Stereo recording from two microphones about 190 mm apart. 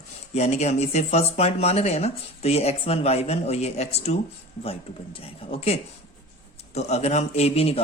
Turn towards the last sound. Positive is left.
turn(degrees=30)  # may be behind; listen again after turning